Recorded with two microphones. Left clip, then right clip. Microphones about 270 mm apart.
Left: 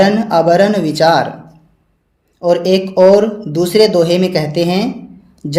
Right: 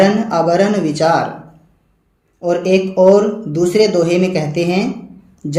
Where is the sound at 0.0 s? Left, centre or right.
Left.